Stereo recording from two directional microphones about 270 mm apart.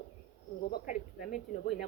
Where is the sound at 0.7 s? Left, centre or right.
Left.